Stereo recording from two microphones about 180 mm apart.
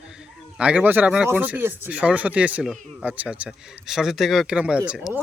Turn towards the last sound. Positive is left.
turn(degrees=-5)  # may be behind; listen again after turning